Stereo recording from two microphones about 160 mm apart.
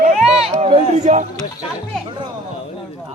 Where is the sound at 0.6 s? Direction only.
45° right (ahead or behind).